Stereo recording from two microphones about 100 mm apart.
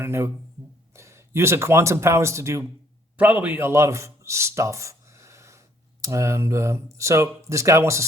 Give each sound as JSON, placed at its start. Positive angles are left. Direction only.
{"t": 0.0, "sound": "speech", "side_deg": -25}
{"t": 3.2, "sound": "a man's voice", "side_deg": -15}